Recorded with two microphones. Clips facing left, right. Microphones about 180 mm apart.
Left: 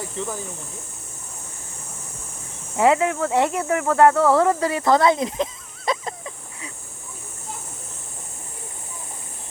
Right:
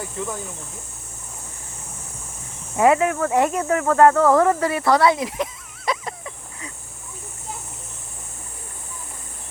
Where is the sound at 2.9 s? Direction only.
20° left (ahead or behind).